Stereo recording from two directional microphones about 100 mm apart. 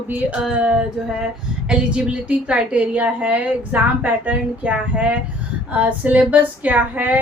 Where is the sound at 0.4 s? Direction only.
10° right (ahead or behind).